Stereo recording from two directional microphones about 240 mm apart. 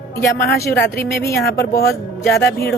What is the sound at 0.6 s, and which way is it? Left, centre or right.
A woman's voice, centre.